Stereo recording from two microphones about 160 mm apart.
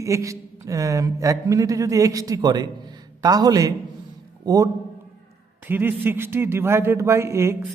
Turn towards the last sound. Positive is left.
turn(degrees=-15)  # may be behind; listen again after turning